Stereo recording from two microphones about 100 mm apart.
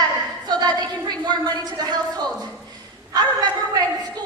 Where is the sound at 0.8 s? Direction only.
40° right (ahead or behind).